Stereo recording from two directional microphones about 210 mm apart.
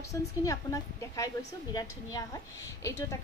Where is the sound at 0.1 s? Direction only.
15° left (ahead or behind).